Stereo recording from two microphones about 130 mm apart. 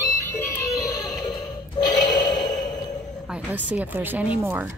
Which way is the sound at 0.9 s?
25° left (ahead or behind).